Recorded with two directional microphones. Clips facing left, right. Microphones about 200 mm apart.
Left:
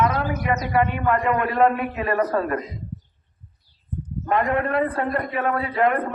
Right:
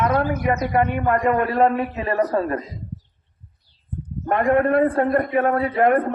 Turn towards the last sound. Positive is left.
turn(degrees=-50)  # may be behind; listen again after turning